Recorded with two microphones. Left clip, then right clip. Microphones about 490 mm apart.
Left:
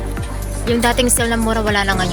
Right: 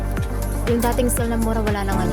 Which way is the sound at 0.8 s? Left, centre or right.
Right.